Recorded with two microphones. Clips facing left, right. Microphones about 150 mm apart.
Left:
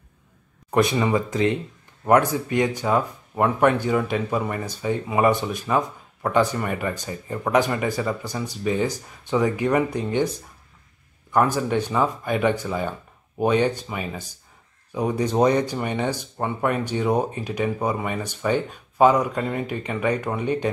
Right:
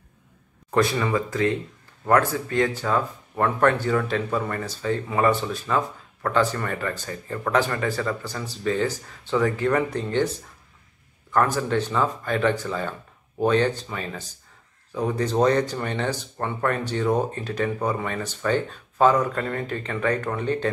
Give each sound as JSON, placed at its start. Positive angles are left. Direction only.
{"t": 0.7, "sound": "speech", "side_deg": 15}